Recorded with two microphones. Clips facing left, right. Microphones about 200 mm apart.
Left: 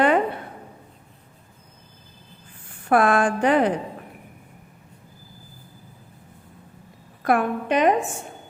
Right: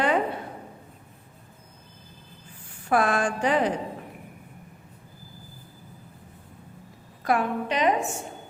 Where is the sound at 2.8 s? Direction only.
55° left (ahead or behind).